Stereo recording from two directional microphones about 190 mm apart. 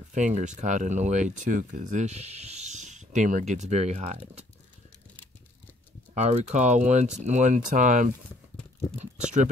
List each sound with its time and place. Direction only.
0.1 s speech: 40° right (ahead or behind)
6.1 s speech: 35° right (ahead or behind)